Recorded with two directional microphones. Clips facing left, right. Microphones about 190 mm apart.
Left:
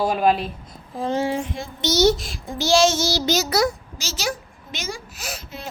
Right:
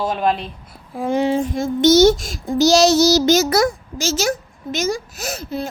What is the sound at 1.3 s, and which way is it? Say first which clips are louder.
Child singing: right 8 dB; 40° right (ahead or behind).